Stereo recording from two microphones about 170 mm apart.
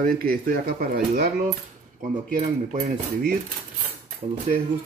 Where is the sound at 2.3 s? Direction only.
50° right (ahead or behind).